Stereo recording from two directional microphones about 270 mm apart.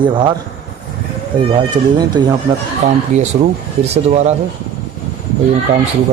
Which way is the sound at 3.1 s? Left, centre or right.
Right.